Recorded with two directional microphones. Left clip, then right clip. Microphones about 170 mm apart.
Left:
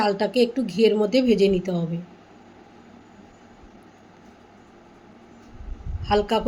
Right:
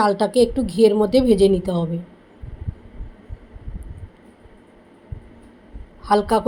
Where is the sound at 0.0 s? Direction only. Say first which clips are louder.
Right 4 dB; 20° right (ahead or behind).